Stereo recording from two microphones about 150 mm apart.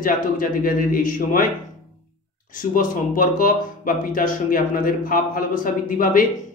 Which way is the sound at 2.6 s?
65° left (ahead or behind).